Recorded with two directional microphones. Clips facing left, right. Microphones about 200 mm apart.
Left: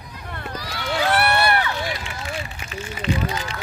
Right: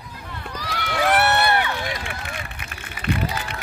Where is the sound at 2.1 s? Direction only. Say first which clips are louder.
Left 2 dB; 60° right (ahead or behind).